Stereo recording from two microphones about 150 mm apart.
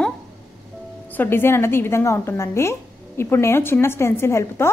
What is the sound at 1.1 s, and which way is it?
A woman's voice, 15° left (ahead or behind).